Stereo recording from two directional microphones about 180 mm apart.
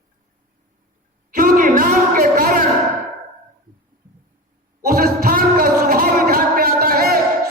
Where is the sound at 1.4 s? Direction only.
50° right (ahead or behind).